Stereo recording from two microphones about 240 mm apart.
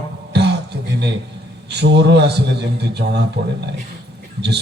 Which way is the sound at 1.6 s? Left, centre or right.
Right.